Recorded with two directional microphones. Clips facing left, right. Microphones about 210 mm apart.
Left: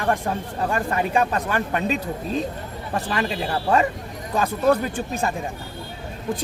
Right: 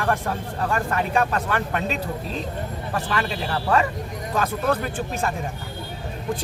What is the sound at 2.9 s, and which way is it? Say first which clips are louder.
Speech: left 2 dB; 25° left (ahead or behind).